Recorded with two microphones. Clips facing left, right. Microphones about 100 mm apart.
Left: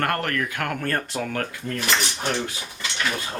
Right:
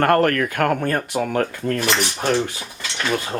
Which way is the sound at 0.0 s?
45° right (ahead or behind).